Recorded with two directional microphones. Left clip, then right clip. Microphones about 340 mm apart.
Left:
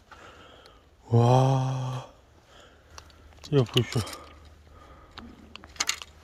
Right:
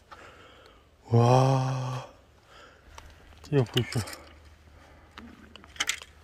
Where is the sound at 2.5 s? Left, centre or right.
Centre.